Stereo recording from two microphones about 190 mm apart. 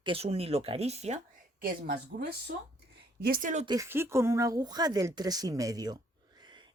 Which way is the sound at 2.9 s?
60° right (ahead or behind).